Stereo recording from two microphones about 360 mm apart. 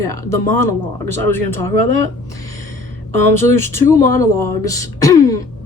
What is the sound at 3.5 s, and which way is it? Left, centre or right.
Speech, centre.